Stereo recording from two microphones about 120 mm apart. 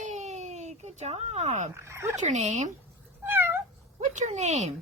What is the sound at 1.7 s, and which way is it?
Speech, 20° right (ahead or behind).